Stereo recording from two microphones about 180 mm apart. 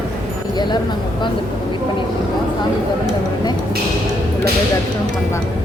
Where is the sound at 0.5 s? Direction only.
25° left (ahead or behind).